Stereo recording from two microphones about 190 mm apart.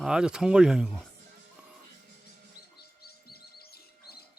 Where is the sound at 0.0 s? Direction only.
5° right (ahead or behind).